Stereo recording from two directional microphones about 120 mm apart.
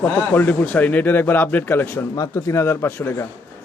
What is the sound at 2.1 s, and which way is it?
Speech, 25° left (ahead or behind).